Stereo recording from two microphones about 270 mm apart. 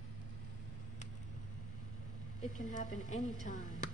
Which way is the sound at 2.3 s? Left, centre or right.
Left.